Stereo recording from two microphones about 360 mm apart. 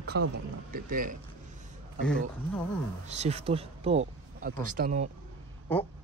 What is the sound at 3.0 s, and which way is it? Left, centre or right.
Speech, centre.